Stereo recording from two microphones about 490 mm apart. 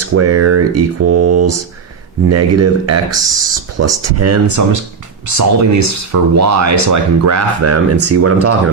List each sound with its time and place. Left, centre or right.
0.1 s speech: right
3.1 s speech: centre
3.8 s speech: right